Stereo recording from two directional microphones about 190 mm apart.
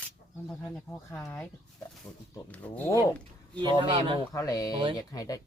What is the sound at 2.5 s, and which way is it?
Speech, 10° left (ahead or behind).